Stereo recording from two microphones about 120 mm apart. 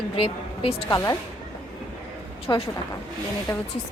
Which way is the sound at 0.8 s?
25° left (ahead or behind).